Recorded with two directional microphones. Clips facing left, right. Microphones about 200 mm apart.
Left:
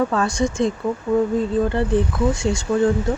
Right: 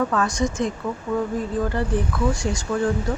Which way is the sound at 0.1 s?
30° left (ahead or behind).